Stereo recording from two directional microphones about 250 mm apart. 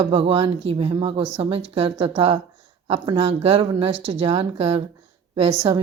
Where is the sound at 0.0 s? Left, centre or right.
Right.